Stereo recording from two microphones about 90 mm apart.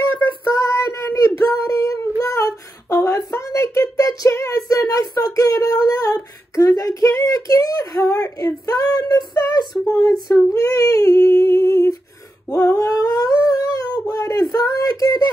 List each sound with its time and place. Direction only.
0.8 s child singing: 35° left (ahead or behind)
9.9 s humming: 40° left (ahead or behind)
12.4 s a sound: 35° left (ahead or behind)